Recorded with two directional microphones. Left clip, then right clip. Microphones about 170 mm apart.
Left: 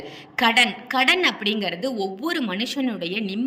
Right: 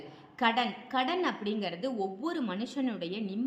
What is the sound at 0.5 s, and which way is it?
A woman's voice, 60° left (ahead or behind).